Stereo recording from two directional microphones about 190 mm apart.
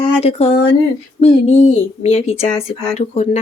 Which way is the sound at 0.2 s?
30° left (ahead or behind).